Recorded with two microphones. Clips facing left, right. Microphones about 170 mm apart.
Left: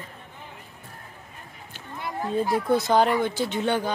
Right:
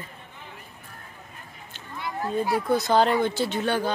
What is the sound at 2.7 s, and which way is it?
Speech, 15° left (ahead or behind).